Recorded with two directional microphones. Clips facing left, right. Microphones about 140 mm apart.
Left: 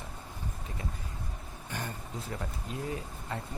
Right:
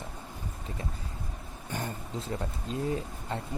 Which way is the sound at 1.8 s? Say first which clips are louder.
Right 3 dB; 25° right (ahead or behind).